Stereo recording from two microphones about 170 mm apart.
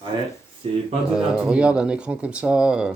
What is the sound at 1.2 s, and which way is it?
Speech, 5° right (ahead or behind).